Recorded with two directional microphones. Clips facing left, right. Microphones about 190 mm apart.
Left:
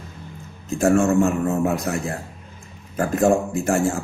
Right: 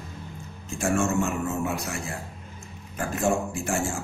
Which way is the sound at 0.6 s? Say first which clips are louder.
Left 9 dB; 40° left (ahead or behind).